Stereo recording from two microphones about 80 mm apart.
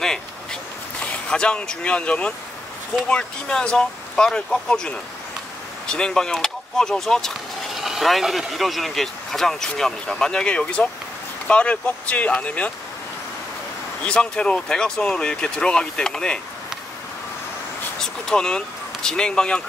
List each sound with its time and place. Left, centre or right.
0.0 s a sound: centre
1.3 s speech: centre
14.0 s speech: centre
18.0 s speech: centre